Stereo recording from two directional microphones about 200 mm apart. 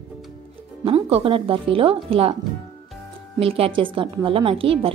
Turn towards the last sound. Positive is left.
turn(degrees=-30)  # may be behind; listen again after turning